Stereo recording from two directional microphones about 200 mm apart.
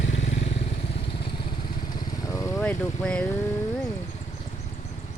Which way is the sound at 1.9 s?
15° left (ahead or behind).